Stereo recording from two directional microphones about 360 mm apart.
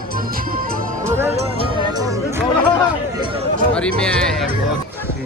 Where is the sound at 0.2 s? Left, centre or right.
Right.